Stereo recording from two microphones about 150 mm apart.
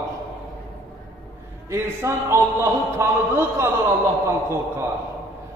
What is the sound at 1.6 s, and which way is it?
A man's voice, 20° right (ahead or behind).